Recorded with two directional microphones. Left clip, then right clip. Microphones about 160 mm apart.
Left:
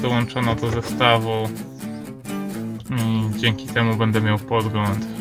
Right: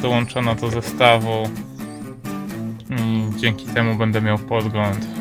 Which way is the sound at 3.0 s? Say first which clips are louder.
Right 1 dB; 30° right (ahead or behind).